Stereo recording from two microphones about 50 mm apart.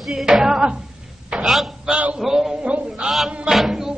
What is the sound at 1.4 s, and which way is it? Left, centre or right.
Speech, centre.